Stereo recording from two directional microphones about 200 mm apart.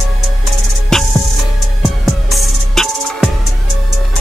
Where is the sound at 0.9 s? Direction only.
Centre (ahead or behind).